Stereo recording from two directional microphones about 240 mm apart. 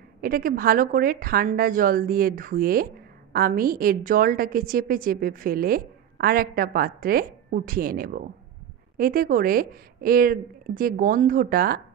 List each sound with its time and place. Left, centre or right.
0.2 s a woman's voice: right